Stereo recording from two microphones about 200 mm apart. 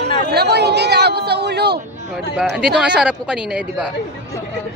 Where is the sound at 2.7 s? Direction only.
5° right (ahead or behind).